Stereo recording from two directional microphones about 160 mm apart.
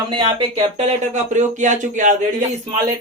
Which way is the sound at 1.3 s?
50° right (ahead or behind).